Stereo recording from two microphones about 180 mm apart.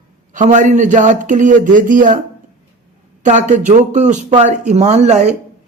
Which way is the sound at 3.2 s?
40° right (ahead or behind).